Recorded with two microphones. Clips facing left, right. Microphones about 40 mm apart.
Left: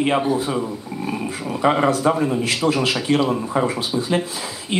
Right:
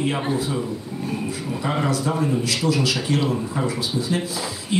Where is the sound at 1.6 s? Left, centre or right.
Left.